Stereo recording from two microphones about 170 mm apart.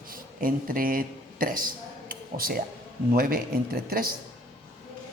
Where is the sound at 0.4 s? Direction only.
55° right (ahead or behind).